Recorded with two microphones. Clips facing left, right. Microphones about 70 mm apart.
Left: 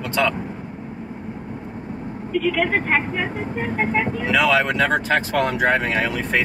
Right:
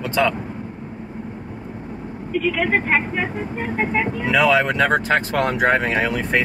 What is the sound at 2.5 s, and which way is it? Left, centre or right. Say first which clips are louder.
Speech: right 3 dB; right.